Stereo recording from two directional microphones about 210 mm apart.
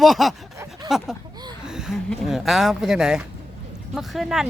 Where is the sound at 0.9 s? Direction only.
Centre (ahead or behind).